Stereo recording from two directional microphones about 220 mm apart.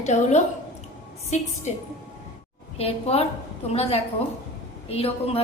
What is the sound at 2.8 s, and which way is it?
A woman's voice, 25° left (ahead or behind).